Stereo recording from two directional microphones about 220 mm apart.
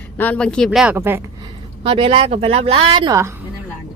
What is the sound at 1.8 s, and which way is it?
A woman's voice, 25° right (ahead or behind).